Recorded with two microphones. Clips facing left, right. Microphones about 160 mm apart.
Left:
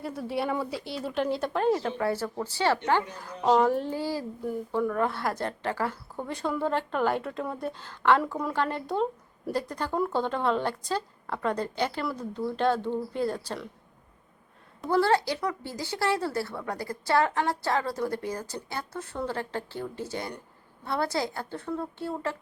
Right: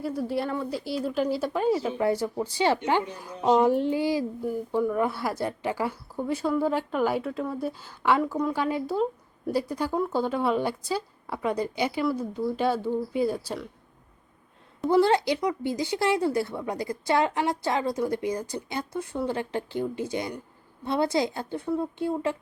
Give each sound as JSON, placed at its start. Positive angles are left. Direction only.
{"t": 0.0, "sound": "speech", "side_deg": 0}
{"t": 2.0, "sound": "speech", "side_deg": -15}
{"t": 14.8, "sound": "speech", "side_deg": -15}